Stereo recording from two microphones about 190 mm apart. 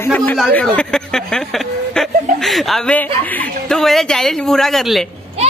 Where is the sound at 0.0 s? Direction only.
10° left (ahead or behind).